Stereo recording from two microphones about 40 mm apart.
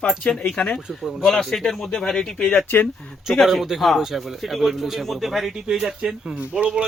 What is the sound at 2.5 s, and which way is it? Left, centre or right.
Speech, left.